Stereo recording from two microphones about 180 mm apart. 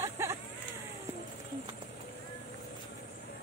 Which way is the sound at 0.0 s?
15° right (ahead or behind).